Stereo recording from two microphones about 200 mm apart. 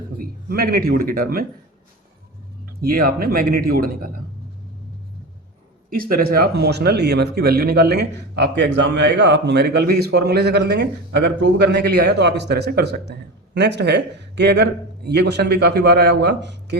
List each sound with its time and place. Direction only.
0.2 s a man's voice: 45° right (ahead or behind)
2.8 s speech: 45° right (ahead or behind)
5.9 s speech: 45° right (ahead or behind)